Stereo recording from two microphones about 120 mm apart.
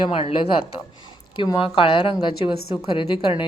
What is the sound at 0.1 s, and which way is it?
Speech, 50° left (ahead or behind).